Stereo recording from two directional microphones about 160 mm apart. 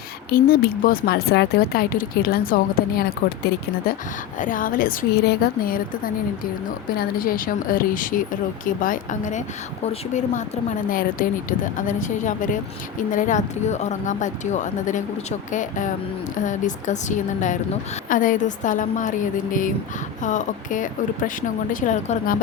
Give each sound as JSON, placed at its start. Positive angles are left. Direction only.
{"t": 0.3, "sound": "speech", "side_deg": 65}
{"t": 4.4, "sound": "speech", "side_deg": 55}
{"t": 6.9, "sound": "a woman's voice", "side_deg": 60}
{"t": 20.2, "sound": "speech", "side_deg": 50}